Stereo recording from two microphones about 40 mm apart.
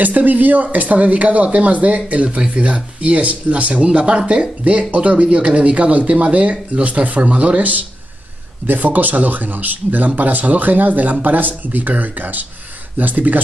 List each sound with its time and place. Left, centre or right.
0.0 s speech: right